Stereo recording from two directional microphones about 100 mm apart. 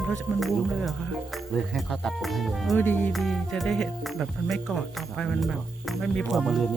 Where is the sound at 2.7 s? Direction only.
15° left (ahead or behind).